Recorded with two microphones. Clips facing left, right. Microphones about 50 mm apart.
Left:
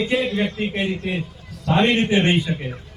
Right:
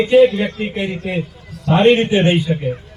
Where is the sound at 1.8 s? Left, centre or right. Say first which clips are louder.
Right 6 dB; right.